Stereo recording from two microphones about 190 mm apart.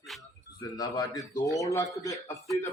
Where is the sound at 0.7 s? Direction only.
20° left (ahead or behind).